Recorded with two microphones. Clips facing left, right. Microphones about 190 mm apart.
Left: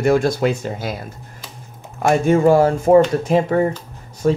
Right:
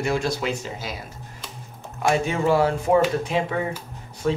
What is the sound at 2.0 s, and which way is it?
Speech, 50° left (ahead or behind).